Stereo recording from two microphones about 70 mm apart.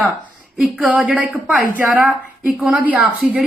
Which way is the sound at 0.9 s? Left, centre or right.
Centre.